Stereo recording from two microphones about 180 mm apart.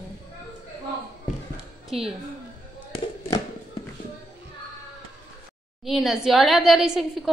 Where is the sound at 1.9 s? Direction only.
35° right (ahead or behind).